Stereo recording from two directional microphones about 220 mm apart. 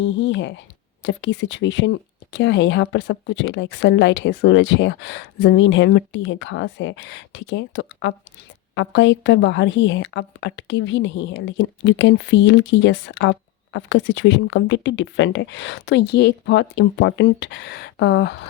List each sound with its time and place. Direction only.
0.0 s speech: 55° left (ahead or behind)